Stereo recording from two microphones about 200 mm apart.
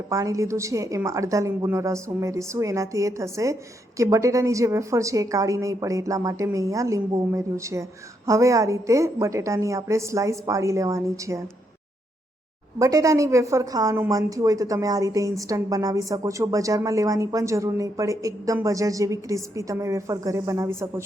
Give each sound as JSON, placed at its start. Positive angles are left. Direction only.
{"t": 0.1, "sound": "a woman's voice", "side_deg": -15}
{"t": 12.8, "sound": "a woman's voice", "side_deg": -15}